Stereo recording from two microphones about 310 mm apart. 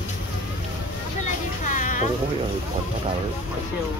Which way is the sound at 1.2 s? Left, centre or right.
Left.